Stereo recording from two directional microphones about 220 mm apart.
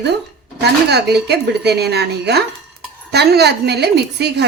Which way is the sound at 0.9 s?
50° right (ahead or behind).